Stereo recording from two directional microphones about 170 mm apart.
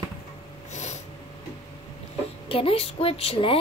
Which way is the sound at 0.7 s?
40° left (ahead or behind).